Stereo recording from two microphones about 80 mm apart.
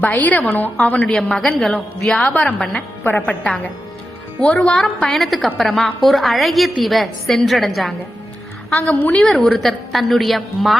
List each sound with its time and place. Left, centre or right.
0.0 s a woman's voice: centre
1.0 s a woman's voice: centre
8.9 s a woman's voice: centre
9.2 s a woman's voice: centre